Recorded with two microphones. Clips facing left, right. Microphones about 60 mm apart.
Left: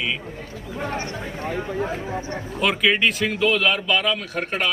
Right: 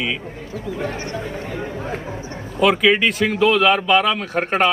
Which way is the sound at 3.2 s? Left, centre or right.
Right.